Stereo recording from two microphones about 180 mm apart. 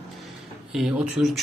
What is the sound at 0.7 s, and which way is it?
Speech, centre (ahead or behind).